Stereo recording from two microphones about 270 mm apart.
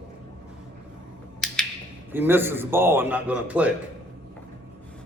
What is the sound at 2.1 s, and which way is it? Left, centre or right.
A man's voice, centre.